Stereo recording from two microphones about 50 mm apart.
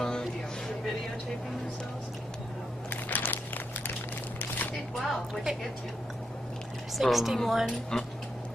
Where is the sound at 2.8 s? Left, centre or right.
Left.